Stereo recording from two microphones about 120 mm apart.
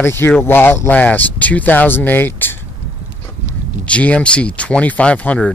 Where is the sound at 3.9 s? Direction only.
10° left (ahead or behind).